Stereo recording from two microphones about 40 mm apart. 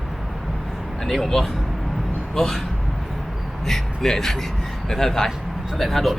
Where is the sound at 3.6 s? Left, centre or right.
Centre.